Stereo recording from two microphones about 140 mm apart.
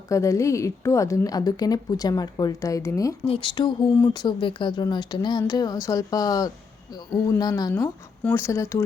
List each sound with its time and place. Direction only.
0.1 s a woman's voice: 20° left (ahead or behind)
3.2 s a woman's voice: 40° left (ahead or behind)
7.7 s a woman's voice: 15° left (ahead or behind)